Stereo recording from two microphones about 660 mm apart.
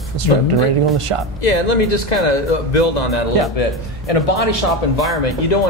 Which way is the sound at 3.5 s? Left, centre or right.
Left.